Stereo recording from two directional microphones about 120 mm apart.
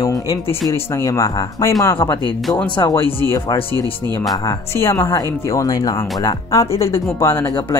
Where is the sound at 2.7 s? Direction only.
40° left (ahead or behind).